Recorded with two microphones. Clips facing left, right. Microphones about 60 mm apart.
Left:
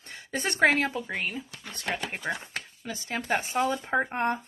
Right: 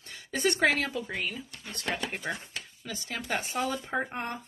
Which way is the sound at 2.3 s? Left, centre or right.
Centre.